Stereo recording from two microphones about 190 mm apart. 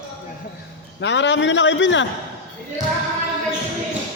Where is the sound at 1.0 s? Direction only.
70° left (ahead or behind).